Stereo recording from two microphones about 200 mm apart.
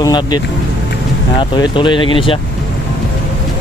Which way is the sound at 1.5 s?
25° left (ahead or behind).